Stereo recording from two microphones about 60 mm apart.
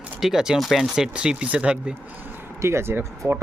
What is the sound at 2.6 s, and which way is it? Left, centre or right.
Speech, right.